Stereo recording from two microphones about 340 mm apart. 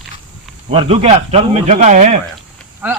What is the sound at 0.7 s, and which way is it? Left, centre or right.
Speech, centre.